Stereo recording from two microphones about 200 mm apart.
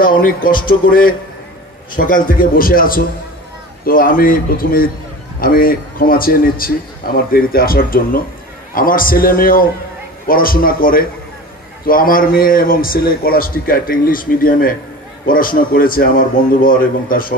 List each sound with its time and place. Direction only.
0.0 s a man's voice: 45° left (ahead or behind)